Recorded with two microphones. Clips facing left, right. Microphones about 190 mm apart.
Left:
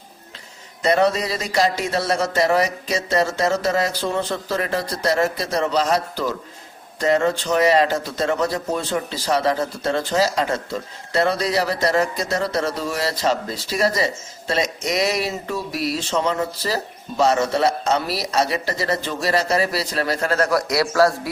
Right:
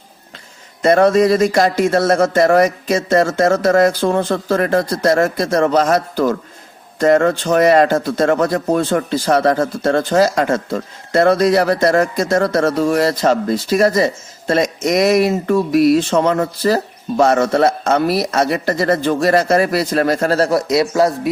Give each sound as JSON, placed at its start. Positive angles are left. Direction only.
{"t": 0.8, "sound": "a man's voice", "side_deg": -50}